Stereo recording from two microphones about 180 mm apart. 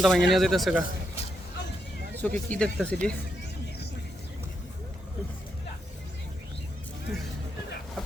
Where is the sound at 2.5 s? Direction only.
5° left (ahead or behind).